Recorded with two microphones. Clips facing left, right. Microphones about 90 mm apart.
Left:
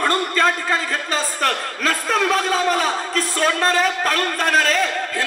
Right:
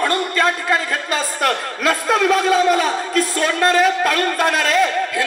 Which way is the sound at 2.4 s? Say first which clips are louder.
Right 4 dB; 40° left (ahead or behind).